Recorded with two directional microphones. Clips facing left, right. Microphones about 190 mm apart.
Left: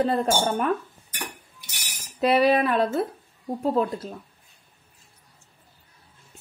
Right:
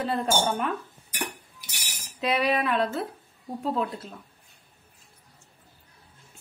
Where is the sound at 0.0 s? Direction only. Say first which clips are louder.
Left 3 dB; 40° left (ahead or behind).